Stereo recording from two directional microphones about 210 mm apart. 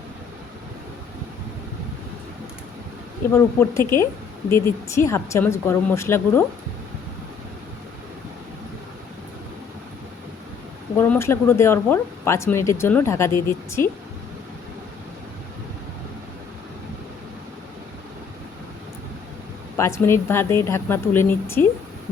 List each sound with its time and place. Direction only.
3.3 s speech: 10° left (ahead or behind)
10.9 s speech: 10° left (ahead or behind)
19.7 s speech: 10° left (ahead or behind)